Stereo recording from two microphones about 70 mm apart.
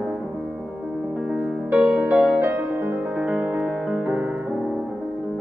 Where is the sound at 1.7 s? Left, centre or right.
Centre.